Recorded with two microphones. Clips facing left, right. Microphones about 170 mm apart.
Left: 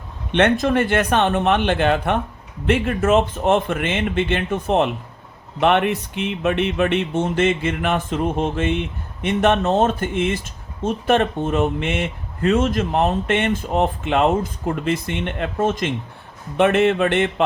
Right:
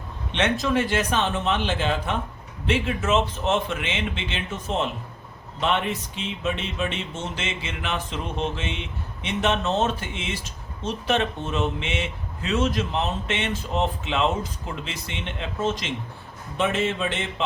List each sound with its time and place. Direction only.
0.3 s speech: 55° left (ahead or behind)